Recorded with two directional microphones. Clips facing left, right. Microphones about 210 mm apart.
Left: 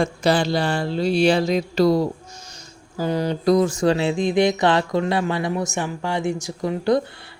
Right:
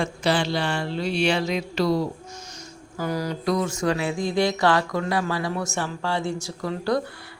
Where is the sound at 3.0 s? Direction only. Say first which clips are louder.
Left 5 dB; 25° left (ahead or behind).